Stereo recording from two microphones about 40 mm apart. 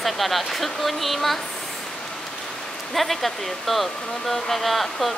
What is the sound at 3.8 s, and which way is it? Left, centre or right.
Speech, centre.